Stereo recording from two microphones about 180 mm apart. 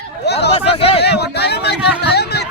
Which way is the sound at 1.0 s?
65° left (ahead or behind).